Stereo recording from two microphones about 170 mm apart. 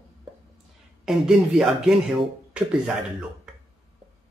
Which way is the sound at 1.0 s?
Centre (ahead or behind).